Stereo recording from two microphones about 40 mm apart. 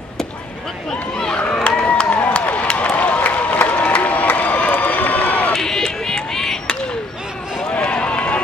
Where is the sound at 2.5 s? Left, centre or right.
Left.